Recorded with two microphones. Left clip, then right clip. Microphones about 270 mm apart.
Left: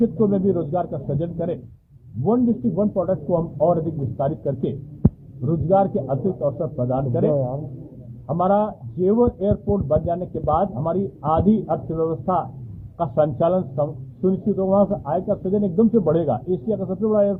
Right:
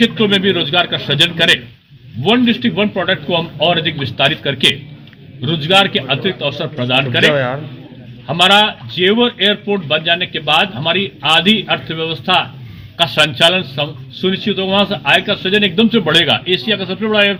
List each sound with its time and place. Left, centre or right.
0.2 s a man's voice: right
5.5 s a man's voice: right